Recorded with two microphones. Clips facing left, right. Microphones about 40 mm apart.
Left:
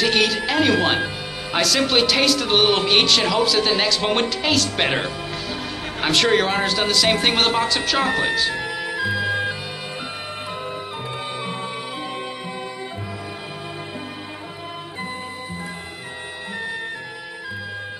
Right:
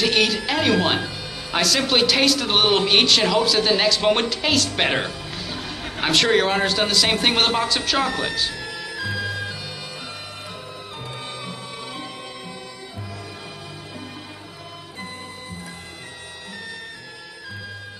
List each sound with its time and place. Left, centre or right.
0.0 s speech: centre
8.1 s speech: centre
8.5 s music: left